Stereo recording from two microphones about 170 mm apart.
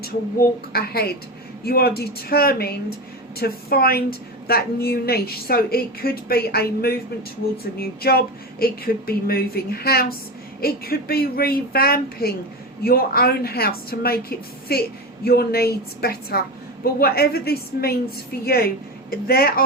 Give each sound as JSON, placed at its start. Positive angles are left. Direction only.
{"t": 0.7, "sound": "a woman's voice", "side_deg": 65}